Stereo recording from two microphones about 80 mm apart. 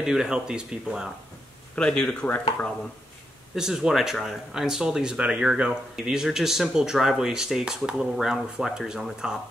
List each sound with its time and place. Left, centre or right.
0.0 s speech: centre
1.8 s speech: centre
3.5 s speech: centre